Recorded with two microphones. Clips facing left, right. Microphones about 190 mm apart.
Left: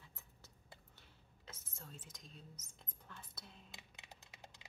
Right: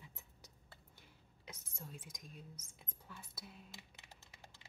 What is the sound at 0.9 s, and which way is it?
Speech, 15° right (ahead or behind).